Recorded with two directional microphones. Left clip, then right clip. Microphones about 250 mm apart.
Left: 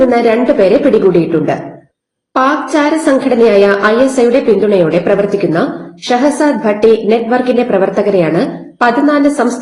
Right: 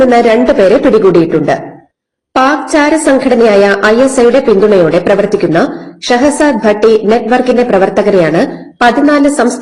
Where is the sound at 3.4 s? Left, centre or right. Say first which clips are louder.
Even; right.